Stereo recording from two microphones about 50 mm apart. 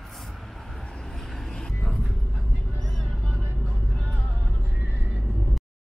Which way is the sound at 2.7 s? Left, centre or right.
Centre.